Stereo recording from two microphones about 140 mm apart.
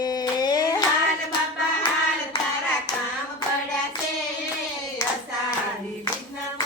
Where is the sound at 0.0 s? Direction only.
30° left (ahead or behind).